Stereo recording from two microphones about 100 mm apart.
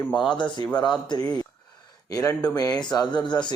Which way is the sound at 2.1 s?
30° left (ahead or behind).